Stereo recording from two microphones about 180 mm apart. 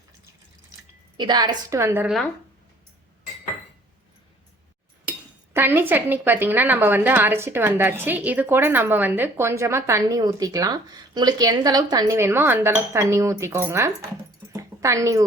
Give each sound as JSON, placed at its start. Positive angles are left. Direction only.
{"t": 1.1, "sound": "a woman's voice", "side_deg": -25}
{"t": 5.5, "sound": "a woman's voice", "side_deg": -10}
{"t": 14.5, "sound": "a sound", "side_deg": -15}